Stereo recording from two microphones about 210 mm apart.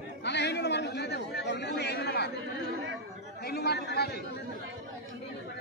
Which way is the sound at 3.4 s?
50° left (ahead or behind).